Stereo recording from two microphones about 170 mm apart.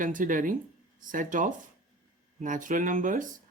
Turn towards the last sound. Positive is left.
turn(degrees=-50)  # may be behind; listen again after turning